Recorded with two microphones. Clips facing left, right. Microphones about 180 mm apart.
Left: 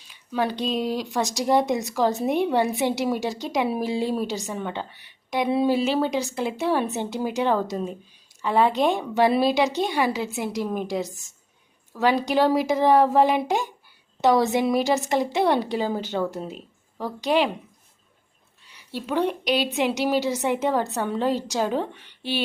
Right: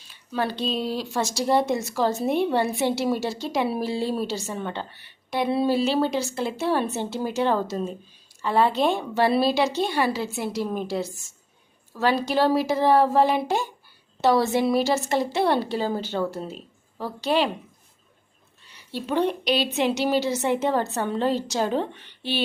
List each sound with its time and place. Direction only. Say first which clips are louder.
0.1 s speech: left 2 dB; 15° left (ahead or behind)
18.7 s speech: even; 10° left (ahead or behind)